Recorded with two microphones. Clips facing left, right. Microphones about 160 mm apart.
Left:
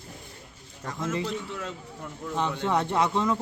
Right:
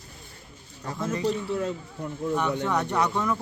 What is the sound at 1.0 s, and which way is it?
Speech, 35° right (ahead or behind).